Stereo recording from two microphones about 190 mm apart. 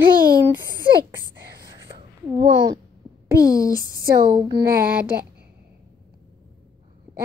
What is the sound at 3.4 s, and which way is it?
Speech, 20° left (ahead or behind).